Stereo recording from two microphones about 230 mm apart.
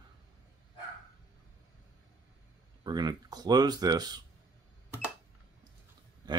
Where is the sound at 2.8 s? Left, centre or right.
Centre.